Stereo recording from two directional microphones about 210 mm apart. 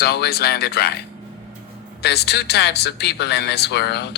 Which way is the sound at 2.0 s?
50° left (ahead or behind).